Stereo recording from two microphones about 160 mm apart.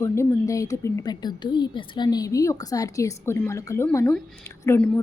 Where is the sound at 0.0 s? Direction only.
20° left (ahead or behind).